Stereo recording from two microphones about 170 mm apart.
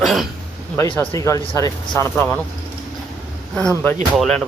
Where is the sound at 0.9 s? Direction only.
20° left (ahead or behind).